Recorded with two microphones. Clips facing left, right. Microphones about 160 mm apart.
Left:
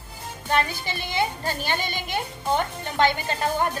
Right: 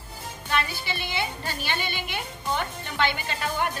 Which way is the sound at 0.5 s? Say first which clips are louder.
Left 3 dB; 45° left (ahead or behind).